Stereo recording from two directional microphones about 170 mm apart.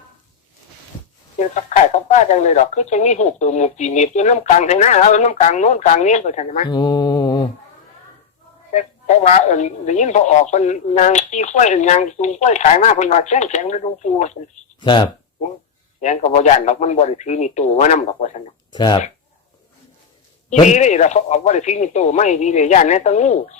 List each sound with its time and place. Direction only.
1.4 s speech: 45° left (ahead or behind)
6.7 s mantra: 25° left (ahead or behind)
8.7 s speech: 45° left (ahead or behind)
14.8 s speech: 25° left (ahead or behind)
16.0 s speech: 45° left (ahead or behind)
18.7 s speech: 25° left (ahead or behind)
20.5 s speech: 45° left (ahead or behind)